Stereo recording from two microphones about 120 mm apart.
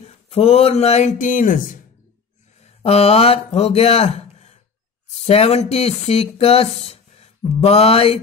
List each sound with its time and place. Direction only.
0.0 s speech: 60° left (ahead or behind); by 1.8 s 90° left
2.6 s speech: 60° left (ahead or behind)
7.6 s mantra: 55° left (ahead or behind)